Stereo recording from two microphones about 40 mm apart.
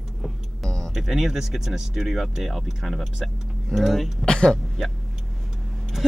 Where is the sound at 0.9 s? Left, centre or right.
Centre.